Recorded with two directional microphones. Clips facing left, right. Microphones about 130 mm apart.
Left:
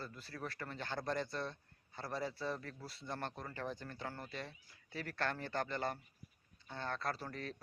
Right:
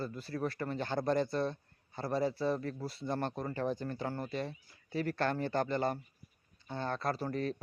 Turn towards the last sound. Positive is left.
turn(degrees=-25)  # may be behind; listen again after turning